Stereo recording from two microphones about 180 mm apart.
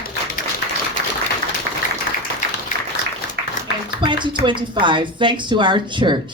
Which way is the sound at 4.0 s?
25° right (ahead or behind).